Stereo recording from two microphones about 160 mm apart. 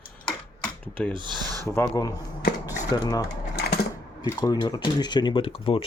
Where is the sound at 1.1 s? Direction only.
25° right (ahead or behind).